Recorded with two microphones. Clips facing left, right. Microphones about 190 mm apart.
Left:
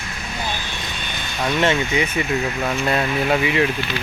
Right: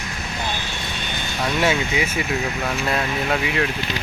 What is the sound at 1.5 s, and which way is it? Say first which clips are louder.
Speech: left 2 dB; 5° right (ahead or behind).